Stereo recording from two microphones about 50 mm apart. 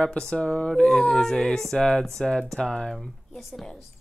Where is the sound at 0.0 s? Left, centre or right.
Centre.